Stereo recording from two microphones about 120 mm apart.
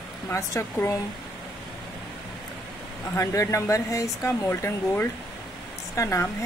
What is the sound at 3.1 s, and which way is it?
Speech, 25° left (ahead or behind).